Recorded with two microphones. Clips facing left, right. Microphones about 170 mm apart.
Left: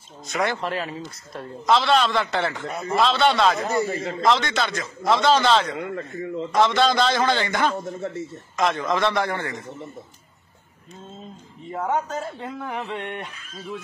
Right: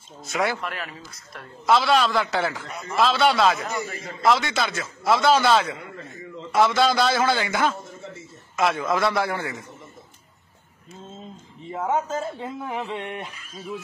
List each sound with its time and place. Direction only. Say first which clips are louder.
0.3 s speech: even; centre (ahead or behind)
0.6 s speech: left 5 dB; 30° left (ahead or behind)
1.7 s speech: even; 5° right (ahead or behind)
2.6 s a man's voice: left 6 dB; 50° left (ahead or behind)
3.0 s speech: even; centre (ahead or behind)
3.6 s a man's voice: left 7 dB; 35° left (ahead or behind)
4.2 s a man's voice: right 1 dB; 5° right (ahead or behind)
5.8 s a man's voice: left 9 dB; 60° left (ahead or behind)
6.5 s a man's voice: even; 5° right (ahead or behind)
7.8 s a man's voice: left 9 dB; 65° left (ahead or behind)
8.5 s a man's voice: even; 5° right (ahead or behind)
11.7 s speech: even; centre (ahead or behind)